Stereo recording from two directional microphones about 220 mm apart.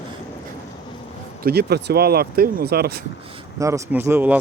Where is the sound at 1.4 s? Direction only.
45° right (ahead or behind).